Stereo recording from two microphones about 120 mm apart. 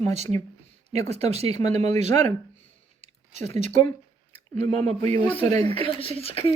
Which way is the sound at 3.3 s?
75° right (ahead or behind).